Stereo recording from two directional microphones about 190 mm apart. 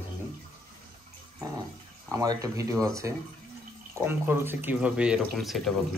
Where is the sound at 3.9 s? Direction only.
10° right (ahead or behind).